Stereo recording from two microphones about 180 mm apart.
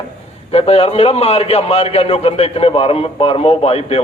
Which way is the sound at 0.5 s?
35° left (ahead or behind).